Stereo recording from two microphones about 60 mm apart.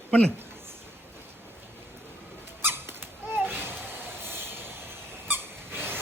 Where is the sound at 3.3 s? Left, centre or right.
Right.